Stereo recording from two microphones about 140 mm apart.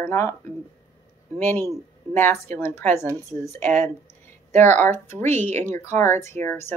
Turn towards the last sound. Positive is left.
turn(degrees=15)  # may be behind; listen again after turning